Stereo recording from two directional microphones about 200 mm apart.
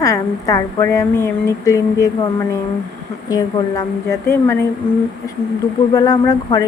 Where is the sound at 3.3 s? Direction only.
20° left (ahead or behind).